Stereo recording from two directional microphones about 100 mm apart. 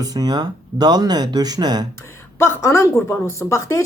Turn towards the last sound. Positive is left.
turn(degrees=30)  # may be behind; listen again after turning